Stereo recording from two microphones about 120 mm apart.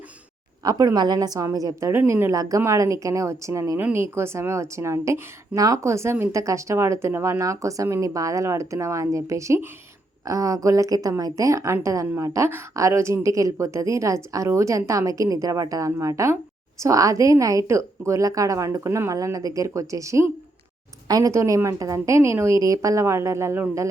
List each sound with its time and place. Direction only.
0.6 s a woman's voice: 30° right (ahead or behind)